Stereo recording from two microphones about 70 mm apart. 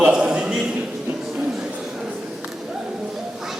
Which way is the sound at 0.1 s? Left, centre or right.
Centre.